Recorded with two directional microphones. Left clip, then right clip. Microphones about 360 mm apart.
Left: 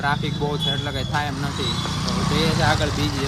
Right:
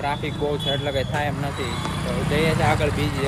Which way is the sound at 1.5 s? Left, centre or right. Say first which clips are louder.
Left 2 dB; centre.